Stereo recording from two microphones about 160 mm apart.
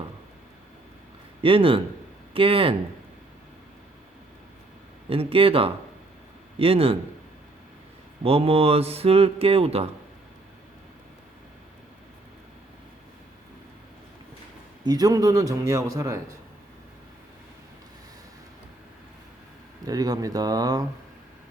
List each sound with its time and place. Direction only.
1.4 s a man's voice: 35° right (ahead or behind)
5.0 s speech: 35° right (ahead or behind)
8.2 s speech: 35° right (ahead or behind)
14.8 s speech: 25° right (ahead or behind)
19.8 s speech: 25° right (ahead or behind)